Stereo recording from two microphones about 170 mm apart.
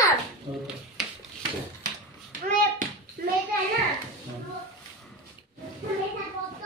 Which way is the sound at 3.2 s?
60° right (ahead or behind).